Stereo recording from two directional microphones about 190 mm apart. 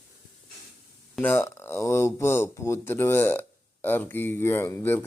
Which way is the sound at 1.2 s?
10° left (ahead or behind).